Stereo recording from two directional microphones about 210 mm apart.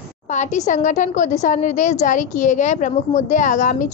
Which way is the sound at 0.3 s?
35° left (ahead or behind).